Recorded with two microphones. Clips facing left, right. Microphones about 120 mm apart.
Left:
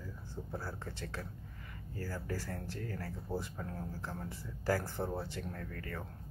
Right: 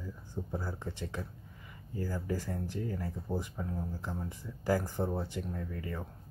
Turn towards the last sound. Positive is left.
turn(degrees=-15)  # may be behind; listen again after turning